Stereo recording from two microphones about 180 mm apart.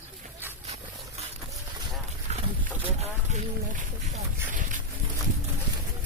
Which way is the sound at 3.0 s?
40° right (ahead or behind).